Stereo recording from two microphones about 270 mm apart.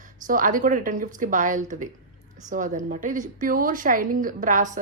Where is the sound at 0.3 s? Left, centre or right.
Right.